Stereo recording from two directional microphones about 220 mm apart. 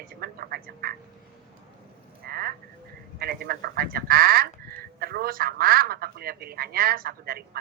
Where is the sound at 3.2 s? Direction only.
45° right (ahead or behind).